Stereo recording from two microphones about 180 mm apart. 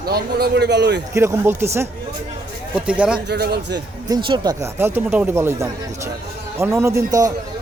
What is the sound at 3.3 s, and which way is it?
Speech, 65° right (ahead or behind).